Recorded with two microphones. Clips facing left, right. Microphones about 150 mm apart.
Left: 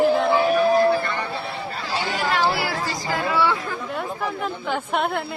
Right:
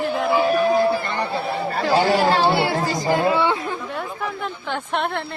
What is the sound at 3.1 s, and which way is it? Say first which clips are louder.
Chatter: right 3 dB; 25° right (ahead or behind).